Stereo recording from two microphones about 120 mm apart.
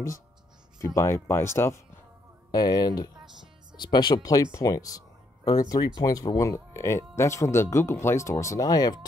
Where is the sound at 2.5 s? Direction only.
35° left (ahead or behind).